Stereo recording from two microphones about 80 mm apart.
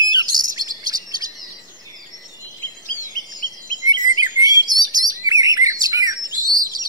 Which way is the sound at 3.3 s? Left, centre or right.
Right.